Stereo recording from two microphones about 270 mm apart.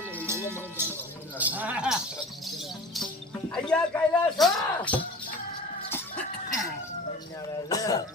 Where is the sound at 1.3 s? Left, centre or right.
Centre.